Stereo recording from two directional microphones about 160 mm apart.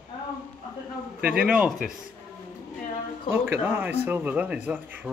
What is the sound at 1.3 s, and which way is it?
Speech, 5° right (ahead or behind).